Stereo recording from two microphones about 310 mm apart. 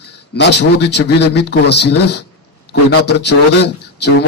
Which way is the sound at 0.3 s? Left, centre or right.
Left.